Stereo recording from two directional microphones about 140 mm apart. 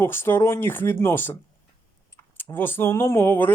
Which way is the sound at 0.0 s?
15° left (ahead or behind).